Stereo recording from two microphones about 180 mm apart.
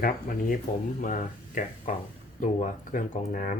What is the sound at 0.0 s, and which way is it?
Speech, 50° left (ahead or behind).